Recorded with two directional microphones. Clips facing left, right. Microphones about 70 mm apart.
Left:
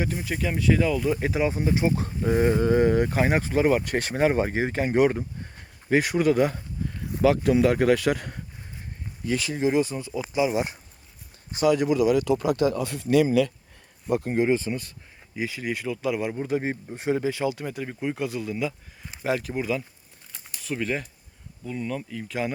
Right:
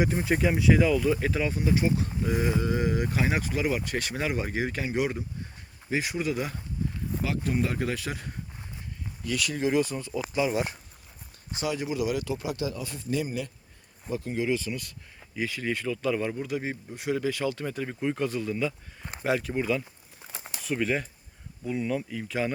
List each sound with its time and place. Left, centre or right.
0.0 s speech: right
0.5 s speech: centre
0.9 s speech: centre; by 6.6 s left
7.2 s speech: left
9.2 s speech: left
9.6 s speech: centre
11.6 s speech: left
14.2 s speech: left
15.4 s speech: centre
16.3 s speech: left; by 19.8 s centre
20.2 s a sound: right
20.7 s speech: centre